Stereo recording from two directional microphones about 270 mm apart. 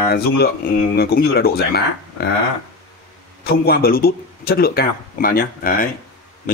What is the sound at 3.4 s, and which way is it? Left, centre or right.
A man's voice, left.